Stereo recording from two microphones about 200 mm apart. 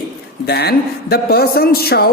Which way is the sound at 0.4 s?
55° left (ahead or behind).